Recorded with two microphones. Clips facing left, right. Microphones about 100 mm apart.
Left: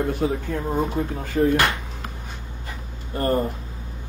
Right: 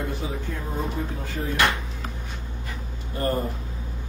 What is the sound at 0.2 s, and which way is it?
Speech, 60° left (ahead or behind).